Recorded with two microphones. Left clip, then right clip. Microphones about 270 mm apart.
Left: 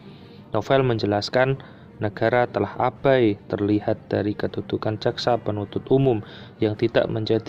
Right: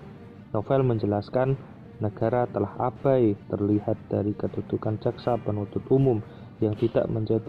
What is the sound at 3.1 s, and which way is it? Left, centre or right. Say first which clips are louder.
Speech: left 3 dB; left.